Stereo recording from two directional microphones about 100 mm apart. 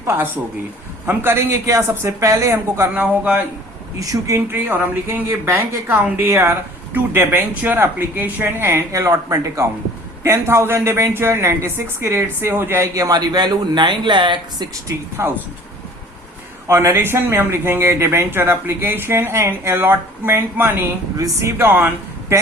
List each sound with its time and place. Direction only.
1.0 s a woman's voice: 25° right (ahead or behind)
4.0 s speech: 35° right (ahead or behind)
4.5 s a woman's voice: 20° right (ahead or behind); by 14.7 s 55° right (ahead or behind)
14.8 s a woman's voice: 30° right (ahead or behind)
16.6 s a woman's voice: 25° right (ahead or behind)
21.2 s speech: 35° right (ahead or behind)
21.6 s a woman's voice: 20° right (ahead or behind)